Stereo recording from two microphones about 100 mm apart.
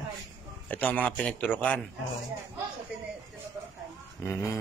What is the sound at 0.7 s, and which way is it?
A man's voice, 15° left (ahead or behind).